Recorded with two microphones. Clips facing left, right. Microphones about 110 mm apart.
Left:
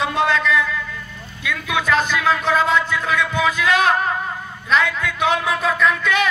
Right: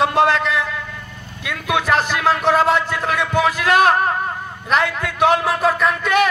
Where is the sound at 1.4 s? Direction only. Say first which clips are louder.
Right 2 dB; 55° right (ahead or behind).